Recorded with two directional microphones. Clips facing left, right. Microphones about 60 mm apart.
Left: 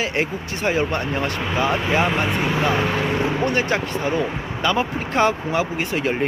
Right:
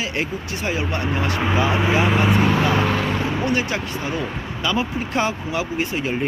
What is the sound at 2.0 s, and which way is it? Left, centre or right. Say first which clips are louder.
Speech: right 3 dB; centre.